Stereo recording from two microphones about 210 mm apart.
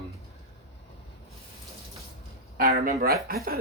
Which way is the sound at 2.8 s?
45° right (ahead or behind).